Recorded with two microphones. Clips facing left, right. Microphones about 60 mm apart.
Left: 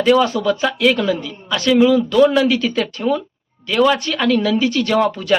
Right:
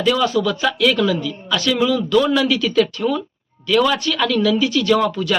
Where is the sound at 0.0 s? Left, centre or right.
Left.